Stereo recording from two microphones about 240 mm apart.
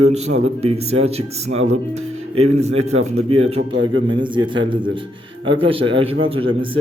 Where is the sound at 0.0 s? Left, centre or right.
Right.